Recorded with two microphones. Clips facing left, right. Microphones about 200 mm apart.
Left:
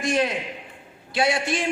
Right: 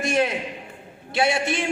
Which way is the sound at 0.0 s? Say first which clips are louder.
Right 1 dB; 25° right (ahead or behind).